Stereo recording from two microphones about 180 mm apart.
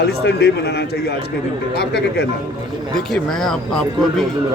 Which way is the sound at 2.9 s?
Centre (ahead or behind).